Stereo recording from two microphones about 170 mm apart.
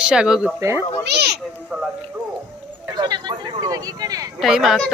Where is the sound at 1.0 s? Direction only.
75° right (ahead or behind).